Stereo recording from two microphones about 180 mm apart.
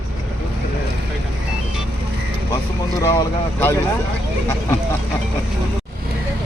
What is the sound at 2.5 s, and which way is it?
Vehicle, 20° left (ahead or behind).